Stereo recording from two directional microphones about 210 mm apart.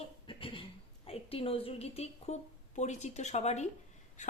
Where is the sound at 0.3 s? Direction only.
25° left (ahead or behind).